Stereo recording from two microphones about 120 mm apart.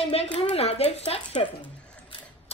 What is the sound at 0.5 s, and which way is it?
Speech, 60° left (ahead or behind).